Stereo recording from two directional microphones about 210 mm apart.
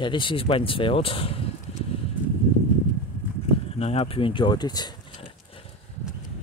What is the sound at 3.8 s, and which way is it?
Speech, 30° left (ahead or behind).